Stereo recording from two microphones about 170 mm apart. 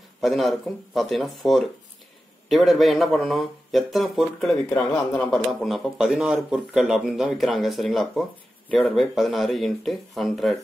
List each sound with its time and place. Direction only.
0.2 s a man's voice: centre (ahead or behind)